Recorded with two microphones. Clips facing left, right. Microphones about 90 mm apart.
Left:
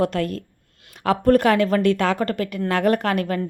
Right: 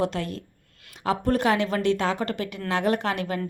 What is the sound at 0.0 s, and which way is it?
A woman's voice, 50° left (ahead or behind).